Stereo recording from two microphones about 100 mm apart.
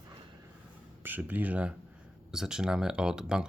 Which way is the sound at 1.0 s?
20° right (ahead or behind).